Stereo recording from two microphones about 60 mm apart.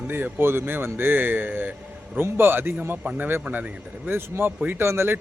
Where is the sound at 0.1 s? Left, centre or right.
Right.